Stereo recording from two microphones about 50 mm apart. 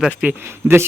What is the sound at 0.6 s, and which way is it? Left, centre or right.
Speech, right.